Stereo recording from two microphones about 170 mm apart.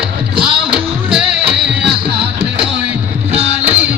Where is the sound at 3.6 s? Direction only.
10° right (ahead or behind).